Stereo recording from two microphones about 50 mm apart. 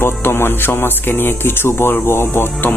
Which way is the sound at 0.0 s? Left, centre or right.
Left.